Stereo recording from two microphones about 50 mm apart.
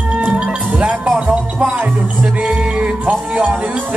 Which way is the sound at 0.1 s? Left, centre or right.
Right.